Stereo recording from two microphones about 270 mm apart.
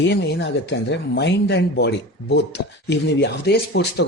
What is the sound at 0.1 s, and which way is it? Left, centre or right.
Speech, left.